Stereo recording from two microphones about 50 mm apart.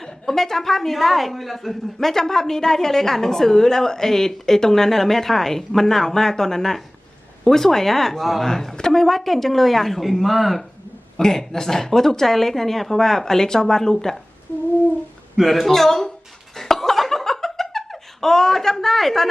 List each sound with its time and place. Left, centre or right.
0.0 s a woman's voice: centre
14.5 s a sound: left
15.4 s a woman's voice: centre
16.6 s laughter: centre